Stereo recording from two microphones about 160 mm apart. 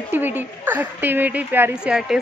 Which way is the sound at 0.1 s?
10° right (ahead or behind).